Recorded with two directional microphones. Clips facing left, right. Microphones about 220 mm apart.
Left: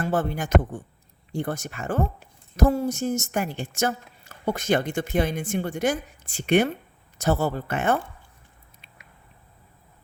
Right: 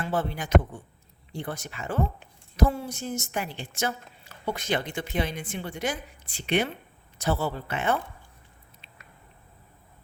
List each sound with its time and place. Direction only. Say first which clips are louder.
0.0 s a woman's voice: left 4 dB; 50° left (ahead or behind)